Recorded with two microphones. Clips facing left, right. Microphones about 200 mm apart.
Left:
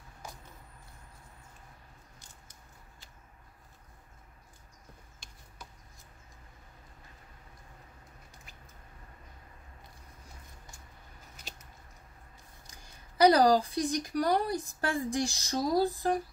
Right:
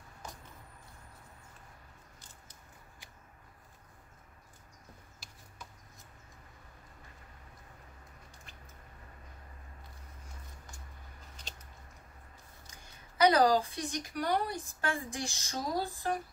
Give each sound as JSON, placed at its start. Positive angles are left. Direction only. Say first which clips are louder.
{"t": 13.2, "sound": "speech", "louder": "left 3 dB", "side_deg": 35}